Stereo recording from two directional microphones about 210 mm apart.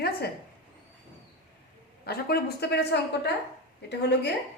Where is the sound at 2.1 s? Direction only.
50° left (ahead or behind).